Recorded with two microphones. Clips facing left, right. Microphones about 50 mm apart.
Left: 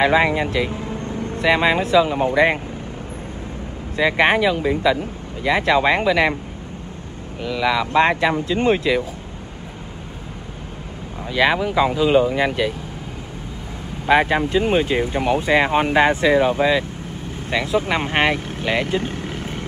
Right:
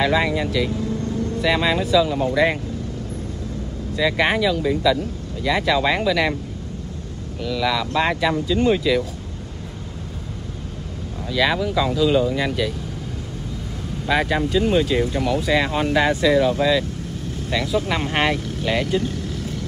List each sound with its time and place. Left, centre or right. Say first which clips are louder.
0.0 s speech: left 3 dB; left
3.9 s speech: left 3 dB; left
7.4 s speech: left 2 dB; left
11.2 s speech: left 2 dB; left
14.0 s speech: left 4 dB; left
18.9 s vehicle: even; left